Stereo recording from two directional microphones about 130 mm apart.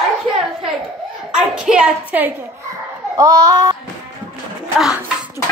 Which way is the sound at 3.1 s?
25° right (ahead or behind).